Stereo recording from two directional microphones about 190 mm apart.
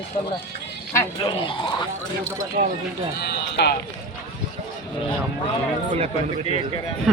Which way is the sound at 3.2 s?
60° left (ahead or behind).